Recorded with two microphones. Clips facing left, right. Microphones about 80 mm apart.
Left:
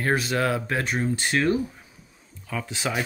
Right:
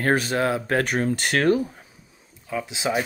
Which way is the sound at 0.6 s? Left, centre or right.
Right.